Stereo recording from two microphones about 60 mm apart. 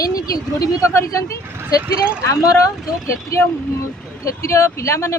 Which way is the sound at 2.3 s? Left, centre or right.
Left.